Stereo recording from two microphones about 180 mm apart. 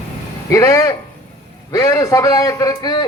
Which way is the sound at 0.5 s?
15° left (ahead or behind).